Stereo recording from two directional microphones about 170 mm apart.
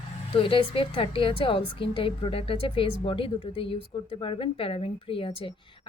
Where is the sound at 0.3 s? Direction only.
30° left (ahead or behind).